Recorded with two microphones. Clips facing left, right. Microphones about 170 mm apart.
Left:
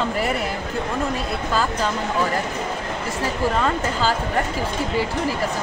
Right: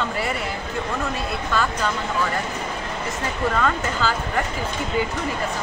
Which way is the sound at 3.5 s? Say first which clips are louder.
Left 1 dB; 30° left (ahead or behind).